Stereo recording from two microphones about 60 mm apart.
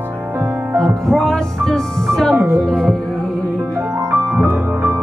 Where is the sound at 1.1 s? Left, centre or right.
Centre.